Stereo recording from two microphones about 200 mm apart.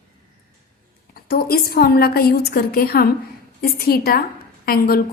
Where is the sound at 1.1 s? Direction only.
50° left (ahead or behind).